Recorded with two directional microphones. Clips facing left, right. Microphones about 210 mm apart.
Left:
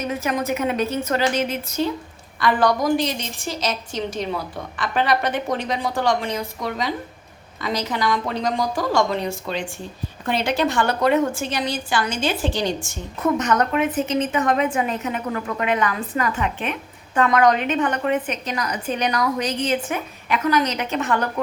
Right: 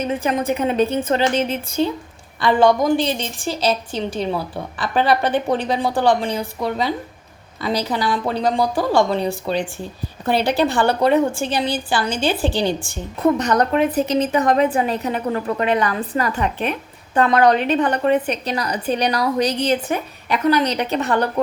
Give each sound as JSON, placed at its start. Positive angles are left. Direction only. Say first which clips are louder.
{"t": 0.1, "sound": "a woman's voice", "louder": "right 2 dB", "side_deg": -30}